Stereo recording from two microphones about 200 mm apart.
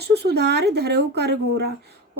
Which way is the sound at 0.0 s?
55° right (ahead or behind).